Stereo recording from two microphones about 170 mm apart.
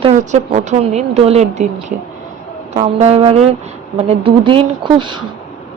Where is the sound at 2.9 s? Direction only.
35° right (ahead or behind).